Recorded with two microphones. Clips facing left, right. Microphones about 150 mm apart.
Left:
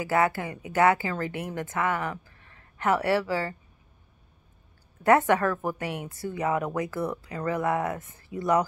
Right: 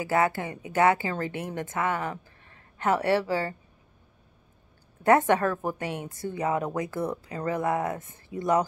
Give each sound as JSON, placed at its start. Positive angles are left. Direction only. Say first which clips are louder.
{"t": 0.1, "sound": "a woman's voice", "louder": "even", "side_deg": -25}
{"t": 5.0, "sound": "a woman's voice", "louder": "even", "side_deg": -25}